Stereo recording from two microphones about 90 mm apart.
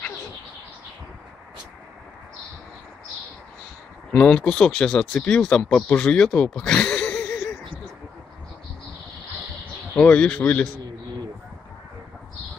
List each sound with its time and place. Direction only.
4.1 s speech: 20° left (ahead or behind)
5.9 s speech: 20° left (ahead or behind)
6.1 s a sound: 10° left (ahead or behind)
9.9 s speech: 15° left (ahead or behind)